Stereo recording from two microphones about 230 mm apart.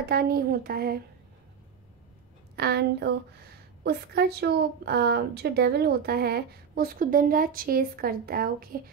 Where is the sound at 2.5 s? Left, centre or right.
Right.